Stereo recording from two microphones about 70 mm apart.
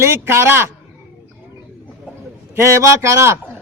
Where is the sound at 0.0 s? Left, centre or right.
Right.